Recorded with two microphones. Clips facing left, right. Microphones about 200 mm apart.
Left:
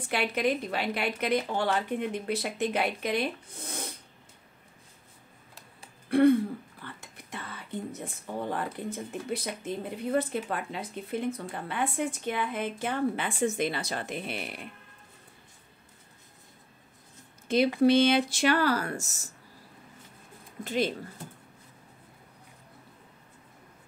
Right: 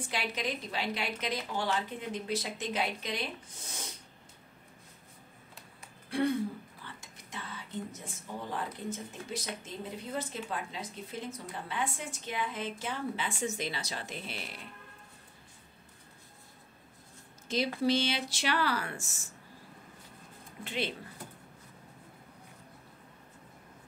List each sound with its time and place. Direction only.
0.1 s speech: 60° left (ahead or behind)
6.0 s speech: 55° left (ahead or behind)
17.5 s speech: 60° left (ahead or behind); by 19.2 s 40° left (ahead or behind)
20.6 s speech: 45° left (ahead or behind)